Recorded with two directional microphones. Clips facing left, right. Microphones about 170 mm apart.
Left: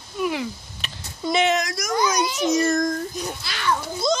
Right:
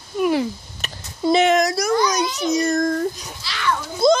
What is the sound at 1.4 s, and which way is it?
Speech, 50° right (ahead or behind).